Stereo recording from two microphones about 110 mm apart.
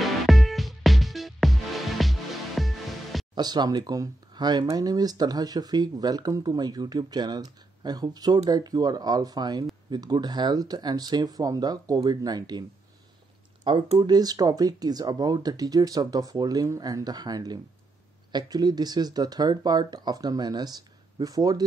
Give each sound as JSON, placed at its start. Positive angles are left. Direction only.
{"t": 0.0, "sound": "music", "side_deg": 0}
{"t": 3.3, "sound": "speech", "side_deg": -40}
{"t": 13.9, "sound": "speech", "side_deg": -40}